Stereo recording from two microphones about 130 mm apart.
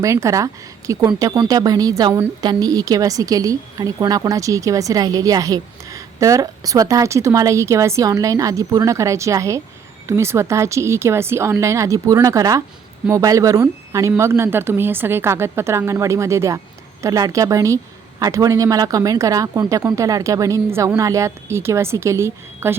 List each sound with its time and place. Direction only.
0.0 s a woman's voice: 25° right (ahead or behind)